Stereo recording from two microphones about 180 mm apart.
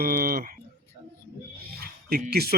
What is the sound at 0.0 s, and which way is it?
Speech, 55° right (ahead or behind).